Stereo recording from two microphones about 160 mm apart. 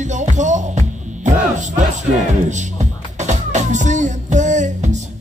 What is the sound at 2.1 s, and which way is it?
Music, 45° right (ahead or behind).